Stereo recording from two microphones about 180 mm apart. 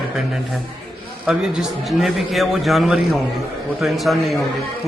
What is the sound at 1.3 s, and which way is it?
A man's voice, centre (ahead or behind).